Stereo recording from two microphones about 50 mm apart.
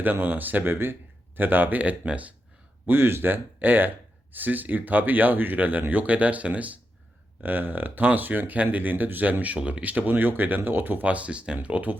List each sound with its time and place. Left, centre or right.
0.0 s speech: right
2.8 s speech: right
9.8 s speech: right
11.0 s speech: right